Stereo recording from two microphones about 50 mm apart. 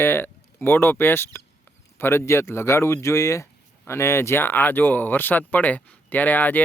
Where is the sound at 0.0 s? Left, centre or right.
Left.